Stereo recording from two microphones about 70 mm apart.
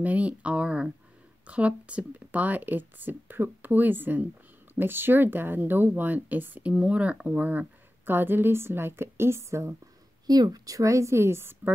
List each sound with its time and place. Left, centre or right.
0.0 s speech: right
10.2 s a woman's voice: right